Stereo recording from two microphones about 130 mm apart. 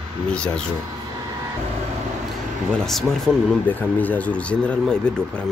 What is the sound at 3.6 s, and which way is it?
Speech, 15° left (ahead or behind).